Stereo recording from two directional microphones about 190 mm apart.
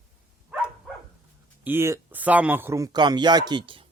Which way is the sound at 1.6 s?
15° right (ahead or behind).